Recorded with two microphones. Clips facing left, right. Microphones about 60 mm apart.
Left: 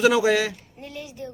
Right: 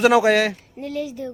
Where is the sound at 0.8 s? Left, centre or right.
Right.